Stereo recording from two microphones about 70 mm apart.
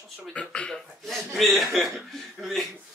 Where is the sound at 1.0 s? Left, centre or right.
Centre.